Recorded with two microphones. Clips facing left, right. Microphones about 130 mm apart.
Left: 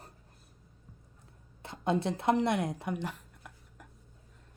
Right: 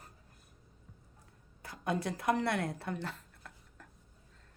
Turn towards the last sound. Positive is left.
turn(degrees=15)  # may be behind; listen again after turning